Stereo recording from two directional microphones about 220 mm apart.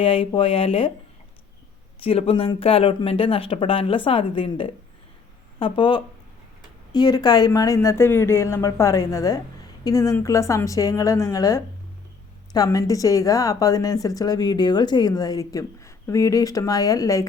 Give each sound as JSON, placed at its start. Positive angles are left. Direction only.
{"t": 0.0, "sound": "speech", "side_deg": 25}
{"t": 2.0, "sound": "a woman's voice", "side_deg": 25}